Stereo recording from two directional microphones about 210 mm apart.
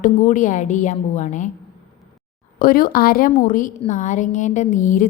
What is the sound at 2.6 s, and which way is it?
A woman's voice, 45° left (ahead or behind).